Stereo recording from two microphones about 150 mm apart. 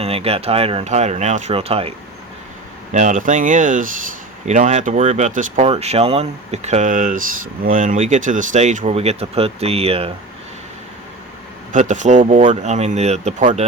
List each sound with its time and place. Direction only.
0.0 s speech: 40° right (ahead or behind)
2.9 s speech: 55° right (ahead or behind)
5.6 s speech: 45° right (ahead or behind)
11.7 s speech: 55° right (ahead or behind)